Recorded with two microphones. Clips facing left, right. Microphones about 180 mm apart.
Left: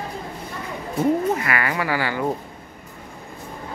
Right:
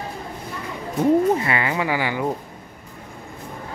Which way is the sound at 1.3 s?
25° right (ahead or behind).